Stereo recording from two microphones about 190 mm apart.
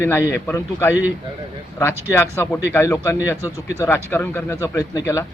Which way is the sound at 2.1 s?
10° left (ahead or behind).